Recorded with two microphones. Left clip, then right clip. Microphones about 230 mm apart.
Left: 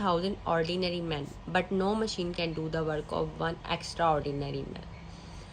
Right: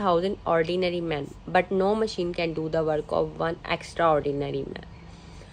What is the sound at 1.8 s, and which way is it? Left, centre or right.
Speech, right.